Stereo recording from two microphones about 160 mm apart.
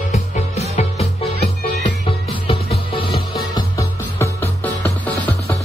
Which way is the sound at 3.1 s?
75° left (ahead or behind).